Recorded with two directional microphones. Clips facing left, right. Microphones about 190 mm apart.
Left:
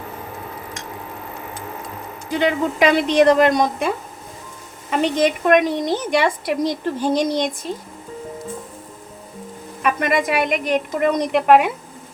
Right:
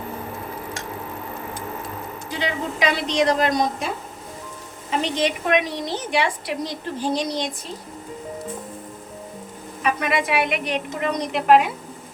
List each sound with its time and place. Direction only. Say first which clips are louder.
2.3 s a woman's voice: left 8 dB; 50° left (ahead or behind)
9.8 s a woman's voice: left 3 dB; 50° left (ahead or behind)